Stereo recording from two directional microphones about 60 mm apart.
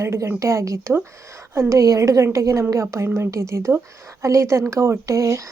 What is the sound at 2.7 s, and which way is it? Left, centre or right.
A woman's voice, right.